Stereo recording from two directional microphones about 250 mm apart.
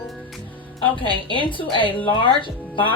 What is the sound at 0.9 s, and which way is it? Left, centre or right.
A woman's voice, centre.